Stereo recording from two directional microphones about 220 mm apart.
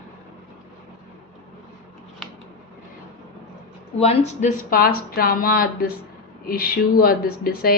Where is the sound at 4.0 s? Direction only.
30° left (ahead or behind).